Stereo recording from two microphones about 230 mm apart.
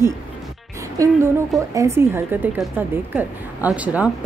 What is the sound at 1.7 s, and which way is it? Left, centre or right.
A woman's voice, centre.